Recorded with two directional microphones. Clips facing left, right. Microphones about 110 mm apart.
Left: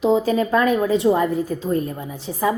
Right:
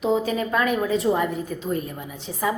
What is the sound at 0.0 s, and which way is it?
A woman's voice, 30° left (ahead or behind).